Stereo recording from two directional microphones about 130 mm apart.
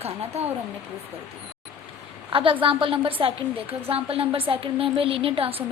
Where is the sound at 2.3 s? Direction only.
45° right (ahead or behind).